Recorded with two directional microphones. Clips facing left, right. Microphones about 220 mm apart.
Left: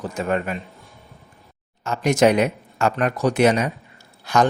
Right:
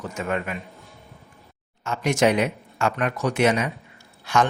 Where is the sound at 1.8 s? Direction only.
40° left (ahead or behind).